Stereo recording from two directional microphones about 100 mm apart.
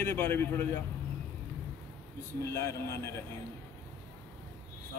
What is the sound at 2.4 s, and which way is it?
Speech, 25° left (ahead or behind).